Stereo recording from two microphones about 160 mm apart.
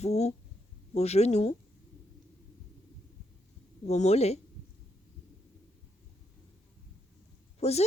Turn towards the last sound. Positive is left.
turn(degrees=40)  # may be behind; listen again after turning